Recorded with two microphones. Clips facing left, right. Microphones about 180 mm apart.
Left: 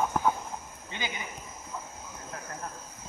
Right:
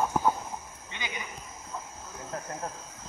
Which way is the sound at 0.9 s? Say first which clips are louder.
Left 2 dB; 30° left (ahead or behind).